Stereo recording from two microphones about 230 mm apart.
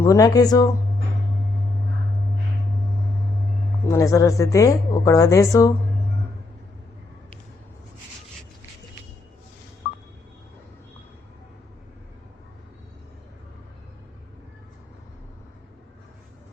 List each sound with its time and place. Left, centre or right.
0.0 s a woman's voice: centre
3.8 s a woman's voice: centre